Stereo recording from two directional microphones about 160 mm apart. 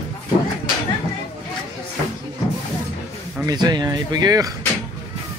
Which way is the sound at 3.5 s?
25° right (ahead or behind).